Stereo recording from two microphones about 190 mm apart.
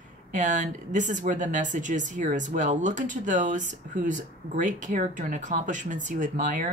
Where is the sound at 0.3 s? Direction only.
40° right (ahead or behind).